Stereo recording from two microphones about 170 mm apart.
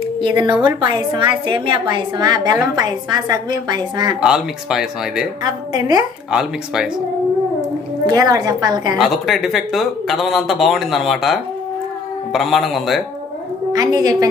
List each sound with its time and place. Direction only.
0.2 s a woman's voice: 25° right (ahead or behind)
4.2 s speech: 5° right (ahead or behind)
5.4 s a woman's voice: 25° right (ahead or behind)
6.3 s speech: 5° right (ahead or behind)
8.1 s a woman's voice: 20° right (ahead or behind)
8.9 s speech: centre (ahead or behind)
13.7 s a woman's voice: 20° right (ahead or behind)